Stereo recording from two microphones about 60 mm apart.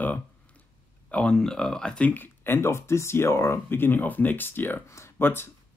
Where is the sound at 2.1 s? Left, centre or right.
Left.